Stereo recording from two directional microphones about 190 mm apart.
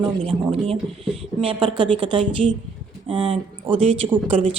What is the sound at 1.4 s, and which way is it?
A woman's voice, 30° right (ahead or behind).